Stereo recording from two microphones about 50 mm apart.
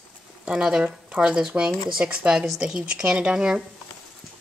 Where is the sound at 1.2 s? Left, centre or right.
Centre.